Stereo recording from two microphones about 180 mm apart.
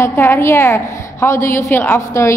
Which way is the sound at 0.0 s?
15° left (ahead or behind).